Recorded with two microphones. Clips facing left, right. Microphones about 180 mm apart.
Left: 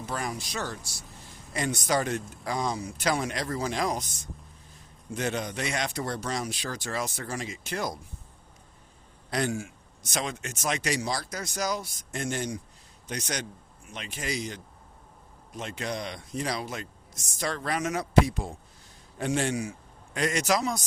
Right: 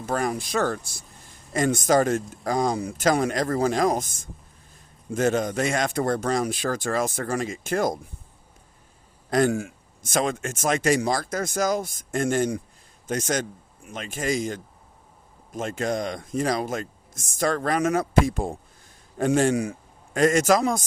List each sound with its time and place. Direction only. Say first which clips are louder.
0.0 s speech: right 7 dB; 50° right (ahead or behind)
9.3 s speech: right 8 dB; 55° right (ahead or behind)